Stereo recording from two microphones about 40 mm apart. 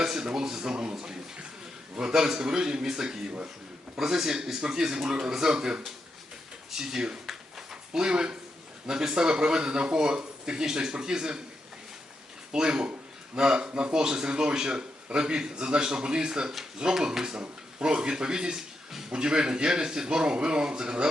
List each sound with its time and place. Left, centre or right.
0.0 s a man's voice: centre
7.3 s a sound: centre
8.9 s speech: centre
12.5 s a man's voice: centre